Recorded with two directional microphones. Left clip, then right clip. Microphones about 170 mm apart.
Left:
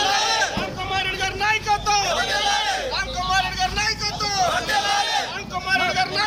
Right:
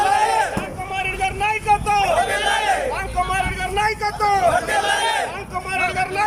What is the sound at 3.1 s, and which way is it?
Vehicle, 55° right (ahead or behind).